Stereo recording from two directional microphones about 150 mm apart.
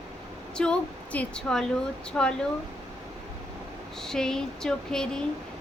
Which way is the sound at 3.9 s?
5° left (ahead or behind).